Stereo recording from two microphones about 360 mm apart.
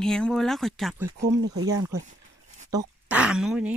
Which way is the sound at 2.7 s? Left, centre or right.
Centre.